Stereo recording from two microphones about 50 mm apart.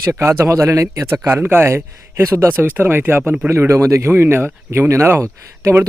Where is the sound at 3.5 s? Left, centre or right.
Right.